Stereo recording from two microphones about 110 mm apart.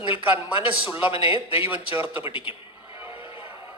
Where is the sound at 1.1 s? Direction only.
55° left (ahead or behind).